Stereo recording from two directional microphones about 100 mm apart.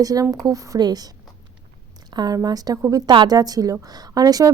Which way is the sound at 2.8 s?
30° right (ahead or behind).